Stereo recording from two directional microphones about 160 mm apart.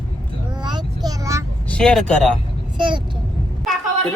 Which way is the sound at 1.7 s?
5° left (ahead or behind).